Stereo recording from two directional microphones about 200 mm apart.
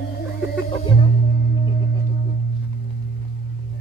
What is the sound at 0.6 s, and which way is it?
Music, 25° left (ahead or behind).